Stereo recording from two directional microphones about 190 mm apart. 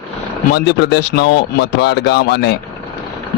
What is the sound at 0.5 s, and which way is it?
Speech, 65° left (ahead or behind).